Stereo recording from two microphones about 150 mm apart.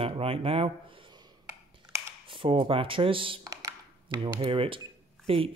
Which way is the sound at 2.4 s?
35° right (ahead or behind).